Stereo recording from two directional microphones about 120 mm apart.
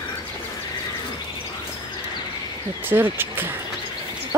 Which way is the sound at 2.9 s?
15° right (ahead or behind).